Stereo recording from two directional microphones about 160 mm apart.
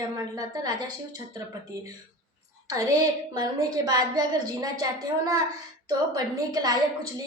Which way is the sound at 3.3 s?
25° right (ahead or behind).